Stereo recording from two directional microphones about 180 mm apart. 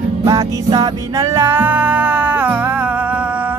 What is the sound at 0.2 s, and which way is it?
Music, 20° right (ahead or behind).